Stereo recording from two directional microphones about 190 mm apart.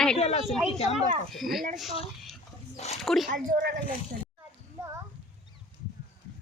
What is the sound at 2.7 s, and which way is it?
Speech, 35° left (ahead or behind).